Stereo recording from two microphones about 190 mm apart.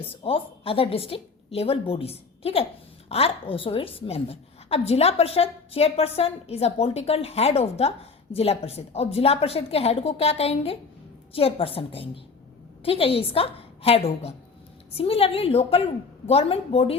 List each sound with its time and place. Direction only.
0.1 s a woman's voice: 30° left (ahead or behind)